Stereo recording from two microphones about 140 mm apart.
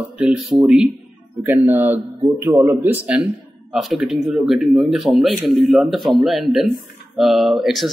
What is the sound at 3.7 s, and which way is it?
Speech, 5° right (ahead or behind).